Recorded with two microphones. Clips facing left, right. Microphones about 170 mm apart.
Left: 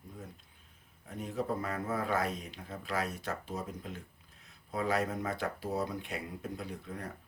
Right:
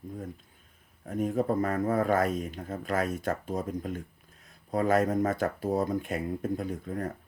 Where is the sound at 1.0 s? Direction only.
45° right (ahead or behind).